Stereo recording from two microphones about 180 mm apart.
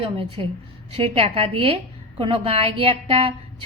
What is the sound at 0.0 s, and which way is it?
A woman's voice, 30° right (ahead or behind).